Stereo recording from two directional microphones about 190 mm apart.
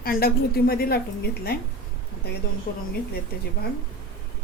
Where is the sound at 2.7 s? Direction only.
55° left (ahead or behind).